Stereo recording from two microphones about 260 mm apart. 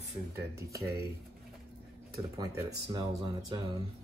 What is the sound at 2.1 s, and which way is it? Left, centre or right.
Speech, centre.